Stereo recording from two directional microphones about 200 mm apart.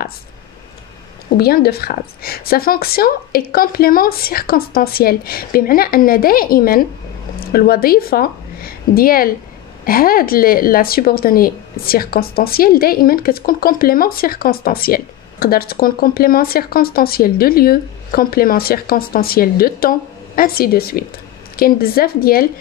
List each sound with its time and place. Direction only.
1.3 s a woman's voice: 50° left (ahead or behind)